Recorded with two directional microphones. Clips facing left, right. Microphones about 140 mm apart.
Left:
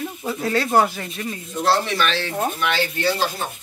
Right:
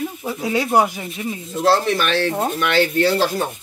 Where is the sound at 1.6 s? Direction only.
45° right (ahead or behind).